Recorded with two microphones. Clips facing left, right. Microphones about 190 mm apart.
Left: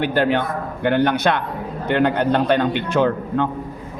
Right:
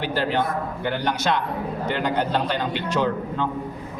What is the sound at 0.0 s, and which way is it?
A man's voice, 60° left (ahead or behind).